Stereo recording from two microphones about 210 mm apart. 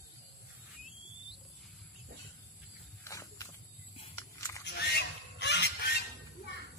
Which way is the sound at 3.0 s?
15° left (ahead or behind).